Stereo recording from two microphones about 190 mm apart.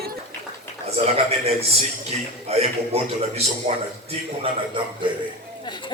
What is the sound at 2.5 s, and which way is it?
Speech, 35° right (ahead or behind).